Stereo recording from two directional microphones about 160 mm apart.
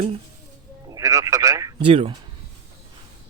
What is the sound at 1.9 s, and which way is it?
Speech, 40° right (ahead or behind).